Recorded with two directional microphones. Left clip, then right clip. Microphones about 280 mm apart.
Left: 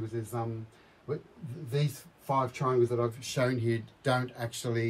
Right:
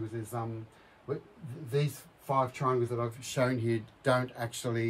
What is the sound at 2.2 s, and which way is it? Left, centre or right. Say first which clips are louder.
Speech: even; centre.